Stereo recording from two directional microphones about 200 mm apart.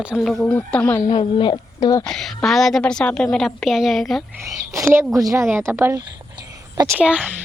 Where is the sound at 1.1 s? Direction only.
25° left (ahead or behind).